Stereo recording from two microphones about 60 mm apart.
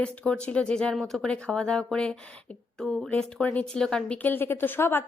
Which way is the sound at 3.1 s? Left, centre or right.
Left.